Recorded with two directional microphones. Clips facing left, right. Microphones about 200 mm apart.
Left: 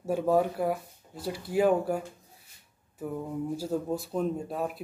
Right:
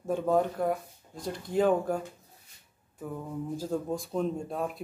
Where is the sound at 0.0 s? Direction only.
5° left (ahead or behind).